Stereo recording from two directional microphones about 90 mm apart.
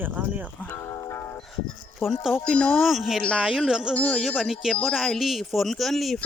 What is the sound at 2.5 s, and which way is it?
Speech, 10° left (ahead or behind).